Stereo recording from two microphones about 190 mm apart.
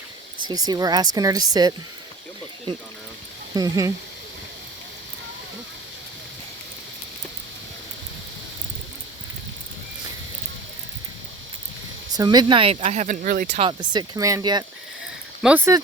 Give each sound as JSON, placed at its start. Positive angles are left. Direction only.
{"t": 0.4, "sound": "speech", "side_deg": -20}
{"t": 12.1, "sound": "speech", "side_deg": -20}
{"t": 13.2, "sound": "speech", "side_deg": -50}
{"t": 13.6, "sound": "speech", "side_deg": -25}
{"t": 15.4, "sound": "speech", "side_deg": -10}